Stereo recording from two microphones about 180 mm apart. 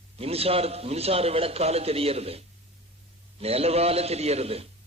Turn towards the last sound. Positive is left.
turn(degrees=-35)  # may be behind; listen again after turning